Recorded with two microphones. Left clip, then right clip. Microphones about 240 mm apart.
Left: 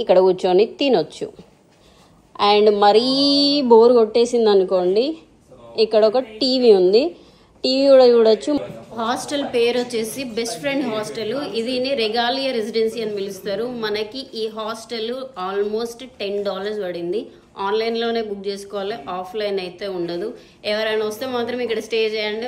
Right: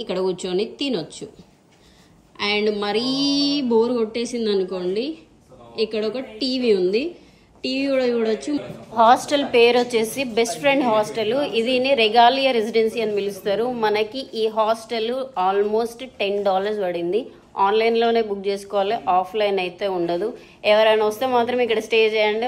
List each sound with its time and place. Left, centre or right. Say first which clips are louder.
2.4 s a woman's voice: left 8 dB; centre
3.6 s speech: left 10 dB; left
3.9 s a woman's voice: left 9 dB; centre
8.9 s a woman's voice: right 8 dB; centre